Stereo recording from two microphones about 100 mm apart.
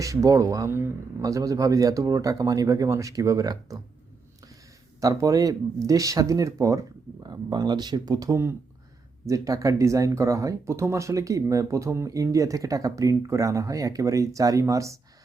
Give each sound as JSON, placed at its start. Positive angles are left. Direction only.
{"t": 0.0, "sound": "speech", "side_deg": -35}
{"t": 4.9, "sound": "speech", "side_deg": -35}